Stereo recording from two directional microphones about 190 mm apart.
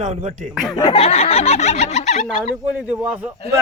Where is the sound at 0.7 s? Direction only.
30° left (ahead or behind).